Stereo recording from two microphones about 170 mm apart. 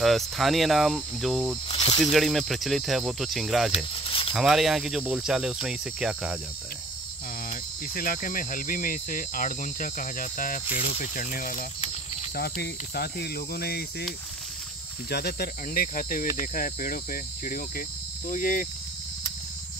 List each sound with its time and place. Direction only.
0.0 s speech: centre (ahead or behind)
1.7 s snake: 35° left (ahead or behind)
2.0 s speech: centre (ahead or behind)
3.7 s snake: 35° left (ahead or behind)
4.3 s speech: centre (ahead or behind)
7.4 s cricket: 55° left (ahead or behind)
12.4 s cricket: 70° left (ahead or behind)
15.0 s cricket: 70° left (ahead or behind); by 18.7 s 50° left (ahead or behind)